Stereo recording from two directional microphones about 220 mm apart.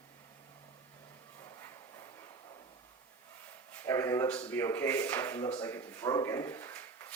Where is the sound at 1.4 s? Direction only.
15° left (ahead or behind).